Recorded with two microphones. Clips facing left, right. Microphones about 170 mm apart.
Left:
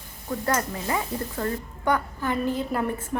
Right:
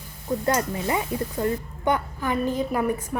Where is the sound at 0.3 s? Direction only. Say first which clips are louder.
Right 3 dB; 20° right (ahead or behind).